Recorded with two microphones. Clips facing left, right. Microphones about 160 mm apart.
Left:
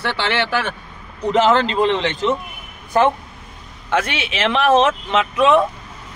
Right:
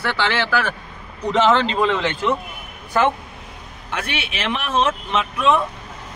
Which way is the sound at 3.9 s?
90° left.